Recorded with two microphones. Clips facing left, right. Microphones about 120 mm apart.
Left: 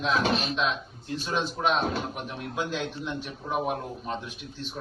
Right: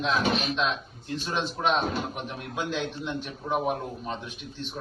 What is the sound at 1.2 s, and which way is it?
A man's voice, centre (ahead or behind).